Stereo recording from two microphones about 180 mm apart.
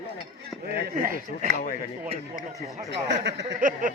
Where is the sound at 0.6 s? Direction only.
65° right (ahead or behind).